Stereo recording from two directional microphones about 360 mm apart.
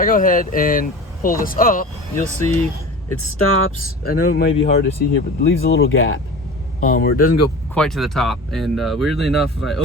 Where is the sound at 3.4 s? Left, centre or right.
Left.